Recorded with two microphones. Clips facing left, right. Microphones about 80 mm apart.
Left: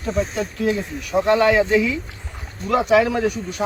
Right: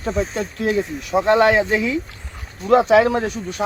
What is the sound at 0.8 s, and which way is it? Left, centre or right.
Speech, right.